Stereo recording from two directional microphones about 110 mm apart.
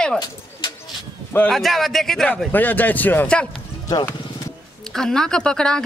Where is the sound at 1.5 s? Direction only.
Centre (ahead or behind).